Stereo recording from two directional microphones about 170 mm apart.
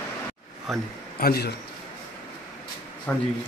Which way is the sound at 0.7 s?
Centre (ahead or behind).